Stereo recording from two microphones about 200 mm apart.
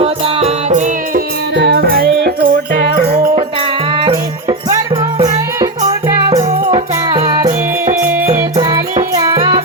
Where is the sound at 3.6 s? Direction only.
25° right (ahead or behind).